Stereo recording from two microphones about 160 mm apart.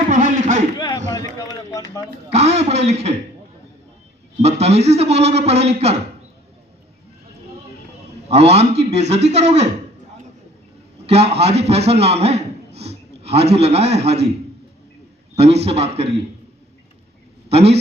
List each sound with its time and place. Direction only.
0.1 s a sound: 50° right (ahead or behind)
1.4 s run: 20° left (ahead or behind)
2.3 s a sound: 40° right (ahead or behind)
4.4 s a man's voice: 45° right (ahead or behind)
8.3 s a man's voice: 40° right (ahead or behind)
11.0 s a man's voice: 40° right (ahead or behind)
15.4 s a man's voice: 40° right (ahead or behind)
17.5 s a man's voice: 40° right (ahead or behind)